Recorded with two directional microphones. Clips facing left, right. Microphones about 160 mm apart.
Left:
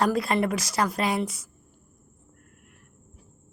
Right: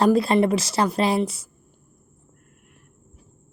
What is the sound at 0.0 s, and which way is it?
A woman's voice, 25° right (ahead or behind).